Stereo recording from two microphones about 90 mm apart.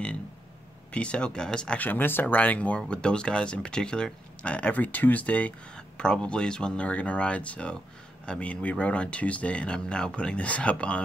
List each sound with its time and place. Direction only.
0.9 s speech: 10° left (ahead or behind)
1.9 s speech: 20° left (ahead or behind)